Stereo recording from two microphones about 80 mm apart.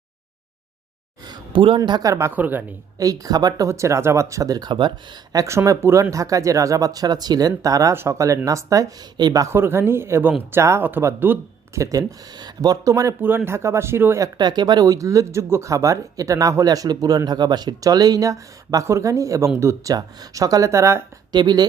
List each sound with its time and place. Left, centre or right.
1.2 s a sound: right
2.3 s a woman's voice: right
3.0 s speech: right
3.7 s speech: right
5.5 s speech: right
9.1 s speech: right
9.5 s speech: right
11.7 s speech: right
12.4 s speech: right
13.2 s speech: right
14.3 s speech: right
19.9 s speech: right
21.3 s speech: right